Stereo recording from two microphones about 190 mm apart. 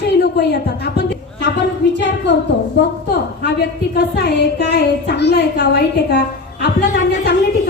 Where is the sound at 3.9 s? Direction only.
60° left (ahead or behind).